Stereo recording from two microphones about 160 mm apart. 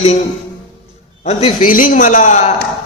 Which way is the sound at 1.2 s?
40° left (ahead or behind).